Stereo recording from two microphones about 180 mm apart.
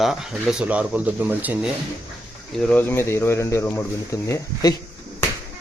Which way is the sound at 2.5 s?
10° left (ahead or behind).